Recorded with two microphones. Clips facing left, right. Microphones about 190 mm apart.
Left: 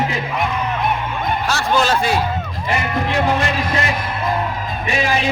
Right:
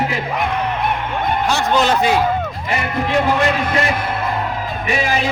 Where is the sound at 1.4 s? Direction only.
20° right (ahead or behind).